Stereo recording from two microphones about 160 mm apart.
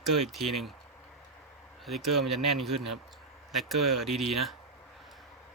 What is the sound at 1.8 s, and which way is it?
Speech, centre (ahead or behind).